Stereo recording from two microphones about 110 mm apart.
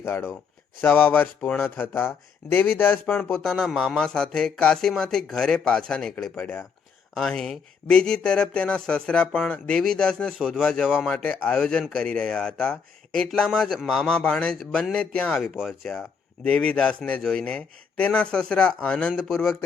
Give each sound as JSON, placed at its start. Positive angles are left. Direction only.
{"t": 0.0, "sound": "speech", "side_deg": 20}
{"t": 3.3, "sound": "speech", "side_deg": 5}
{"t": 6.4, "sound": "a man's voice", "side_deg": 15}
{"t": 7.1, "sound": "a man's voice", "side_deg": 5}
{"t": 10.3, "sound": "speech", "side_deg": -5}
{"t": 11.1, "sound": "a man's voice", "side_deg": 10}
{"t": 15.4, "sound": "a man's voice", "side_deg": 0}